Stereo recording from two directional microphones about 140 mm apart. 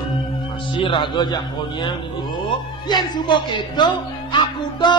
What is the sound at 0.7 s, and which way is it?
Speech, 35° left (ahead or behind).